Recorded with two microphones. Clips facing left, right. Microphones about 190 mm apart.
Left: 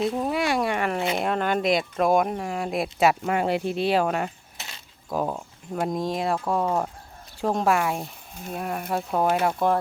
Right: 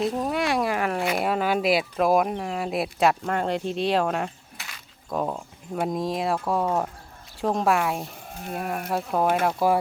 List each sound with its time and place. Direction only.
0.0 s speech: centre (ahead or behind)
4.5 s mechanisms: 25° left (ahead or behind)
5.0 s speech: 5° left (ahead or behind)